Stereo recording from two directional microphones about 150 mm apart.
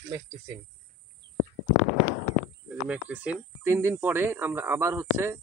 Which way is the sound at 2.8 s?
10° right (ahead or behind).